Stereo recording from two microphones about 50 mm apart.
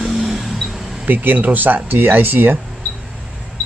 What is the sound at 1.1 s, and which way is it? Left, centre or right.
Speech, right.